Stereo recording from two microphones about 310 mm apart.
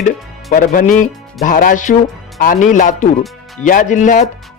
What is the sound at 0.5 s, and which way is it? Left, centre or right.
Speech, left.